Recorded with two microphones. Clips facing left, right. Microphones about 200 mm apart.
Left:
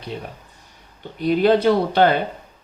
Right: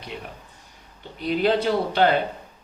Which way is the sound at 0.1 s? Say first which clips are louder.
Left 4 dB; 35° left (ahead or behind).